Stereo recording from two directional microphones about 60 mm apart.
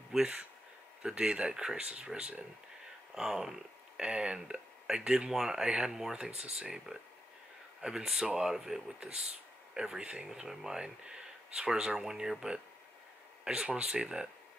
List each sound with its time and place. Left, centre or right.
0.2 s speech: centre